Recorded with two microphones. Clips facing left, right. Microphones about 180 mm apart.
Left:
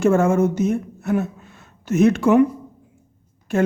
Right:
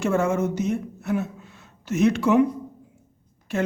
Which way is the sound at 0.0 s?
50° left (ahead or behind).